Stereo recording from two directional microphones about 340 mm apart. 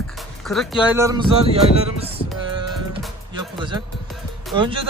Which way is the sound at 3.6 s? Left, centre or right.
Centre.